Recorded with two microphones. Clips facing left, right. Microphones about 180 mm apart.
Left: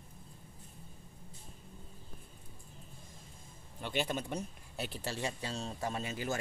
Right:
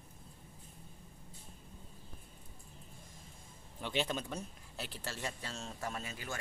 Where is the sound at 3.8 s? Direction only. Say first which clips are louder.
Left 1 dB; 5° left (ahead or behind).